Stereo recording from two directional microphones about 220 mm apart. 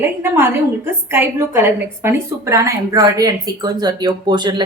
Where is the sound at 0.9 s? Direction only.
10° right (ahead or behind).